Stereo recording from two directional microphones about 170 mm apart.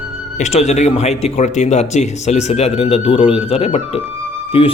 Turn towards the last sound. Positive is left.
turn(degrees=35)  # may be behind; listen again after turning